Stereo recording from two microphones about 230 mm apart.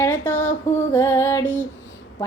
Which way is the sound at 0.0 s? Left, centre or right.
Centre.